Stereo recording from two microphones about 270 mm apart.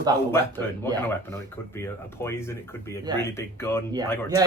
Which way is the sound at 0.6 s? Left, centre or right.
Centre.